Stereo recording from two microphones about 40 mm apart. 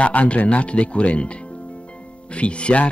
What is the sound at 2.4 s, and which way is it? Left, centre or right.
Speech, left.